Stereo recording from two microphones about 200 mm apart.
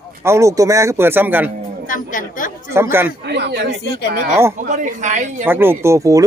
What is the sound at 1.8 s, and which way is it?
Speech, 40° left (ahead or behind).